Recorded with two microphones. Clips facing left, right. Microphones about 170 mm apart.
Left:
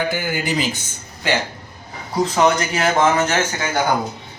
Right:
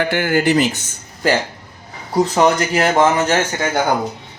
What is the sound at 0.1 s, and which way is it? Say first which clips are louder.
Speech: right 7 dB; 75° right (ahead or behind).